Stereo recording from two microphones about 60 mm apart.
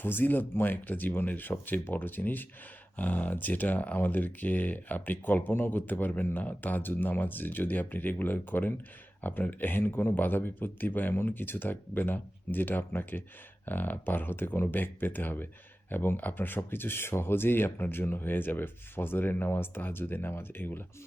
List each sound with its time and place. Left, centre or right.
0.0 s speech: left